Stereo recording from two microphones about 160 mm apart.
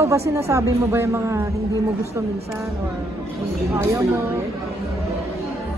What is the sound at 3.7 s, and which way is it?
Speech, 20° right (ahead or behind).